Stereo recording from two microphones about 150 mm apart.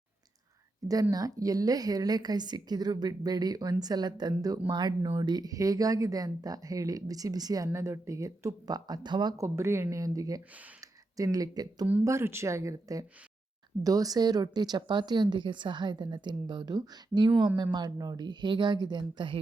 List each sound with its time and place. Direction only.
1.1 s speech: 25° right (ahead or behind)
9.6 s speech: 15° right (ahead or behind)